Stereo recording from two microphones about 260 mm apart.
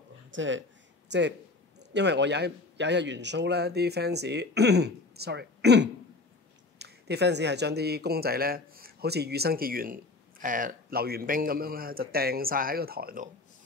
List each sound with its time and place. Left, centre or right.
0.3 s speech: right
1.8 s a man's voice: right